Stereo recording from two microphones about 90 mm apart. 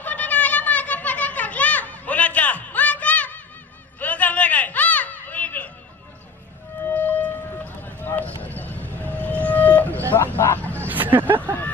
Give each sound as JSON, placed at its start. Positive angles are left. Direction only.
{"t": 0.0, "sound": "a sound", "side_deg": 20}
{"t": 6.8, "sound": "music", "side_deg": 20}
{"t": 10.1, "sound": "vehicle", "side_deg": 25}
{"t": 10.8, "sound": "vehicle", "side_deg": -20}